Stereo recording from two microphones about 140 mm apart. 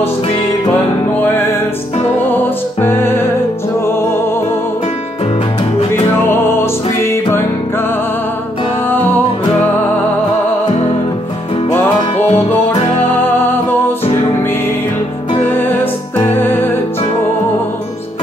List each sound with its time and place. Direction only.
2.1 s music: 15° left (ahead or behind)
6.6 s music: 20° left (ahead or behind)
8.8 s music: 15° left (ahead or behind)
12.2 s music: 45° left (ahead or behind)
13.2 s music: 15° left (ahead or behind)
15.5 s music: 15° left (ahead or behind)